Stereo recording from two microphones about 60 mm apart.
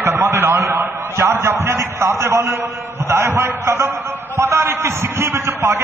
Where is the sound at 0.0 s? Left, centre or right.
Right.